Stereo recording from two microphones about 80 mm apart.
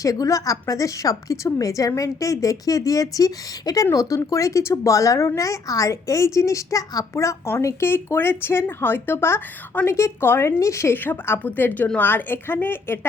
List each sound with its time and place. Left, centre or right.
0.0 s a woman's voice: left
10.9 s speech: left